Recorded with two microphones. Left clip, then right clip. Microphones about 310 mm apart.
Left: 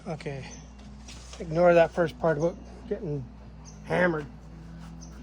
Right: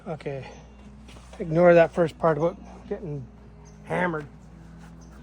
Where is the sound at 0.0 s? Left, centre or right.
Centre.